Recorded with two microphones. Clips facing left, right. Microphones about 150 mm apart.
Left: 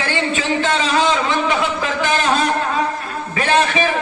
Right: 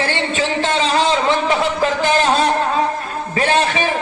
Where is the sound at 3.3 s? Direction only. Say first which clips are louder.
Even; 35° right (ahead or behind).